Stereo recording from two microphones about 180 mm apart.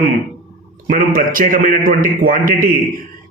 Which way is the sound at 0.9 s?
50° right (ahead or behind).